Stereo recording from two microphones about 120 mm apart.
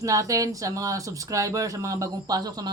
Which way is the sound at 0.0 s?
30° right (ahead or behind).